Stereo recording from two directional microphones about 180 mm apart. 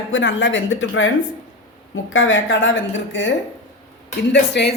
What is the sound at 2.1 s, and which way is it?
A woman's voice, 90° left.